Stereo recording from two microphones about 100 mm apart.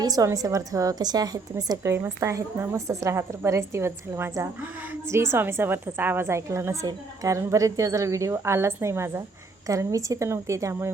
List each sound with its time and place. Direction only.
0.0 s a woman's voice: 40° right (ahead or behind)
1.9 s a woman's voice: 30° right (ahead or behind)